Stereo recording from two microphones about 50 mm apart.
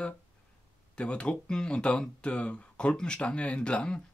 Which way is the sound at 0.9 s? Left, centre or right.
Left.